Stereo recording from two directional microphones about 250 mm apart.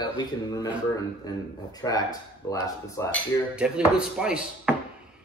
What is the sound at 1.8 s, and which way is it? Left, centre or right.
Speech, centre.